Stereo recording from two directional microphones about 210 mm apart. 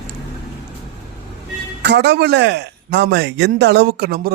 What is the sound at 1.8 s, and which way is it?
Speech, 55° right (ahead or behind).